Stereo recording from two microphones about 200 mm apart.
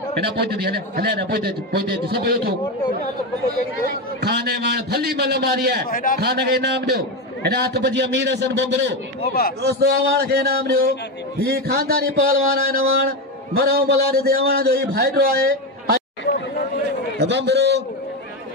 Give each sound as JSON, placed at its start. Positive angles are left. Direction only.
{"t": 0.4, "sound": "a man's voice", "side_deg": -50}
{"t": 4.2, "sound": "a man's voice", "side_deg": -55}
{"t": 5.9, "sound": "a man's voice", "side_deg": 45}
{"t": 6.1, "sound": "a man's voice", "side_deg": -50}
{"t": 17.2, "sound": "a man's voice", "side_deg": -60}